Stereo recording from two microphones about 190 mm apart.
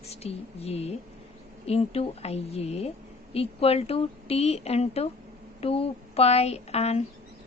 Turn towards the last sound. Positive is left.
turn(degrees=35)  # may be behind; listen again after turning